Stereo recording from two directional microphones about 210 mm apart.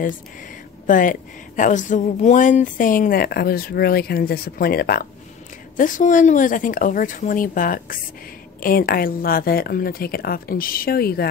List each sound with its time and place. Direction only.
0.8 s a woman's voice: 40° left (ahead or behind)